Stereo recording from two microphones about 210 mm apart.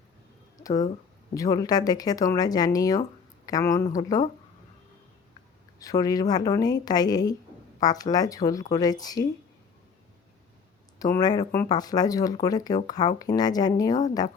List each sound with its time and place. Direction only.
1.3 s speech: 15° left (ahead or behind)
5.8 s speech: 15° left (ahead or behind)
11.0 s speech: 20° left (ahead or behind)